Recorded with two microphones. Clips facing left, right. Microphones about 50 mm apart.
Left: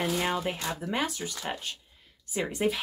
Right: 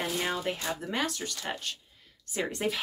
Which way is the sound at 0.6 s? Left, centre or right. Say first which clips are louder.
Left 1 dB; centre.